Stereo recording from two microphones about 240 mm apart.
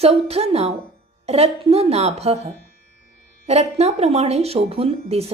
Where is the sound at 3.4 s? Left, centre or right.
Right.